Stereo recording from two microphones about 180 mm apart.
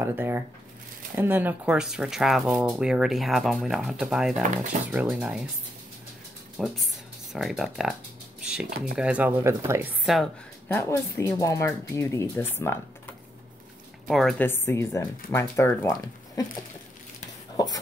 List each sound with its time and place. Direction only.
0.0 s speech: 10° right (ahead or behind)
6.6 s speech: centre (ahead or behind)
10.8 s speech: 15° left (ahead or behind)
14.0 s speech: centre (ahead or behind)
14.5 s speech: 15° left (ahead or behind)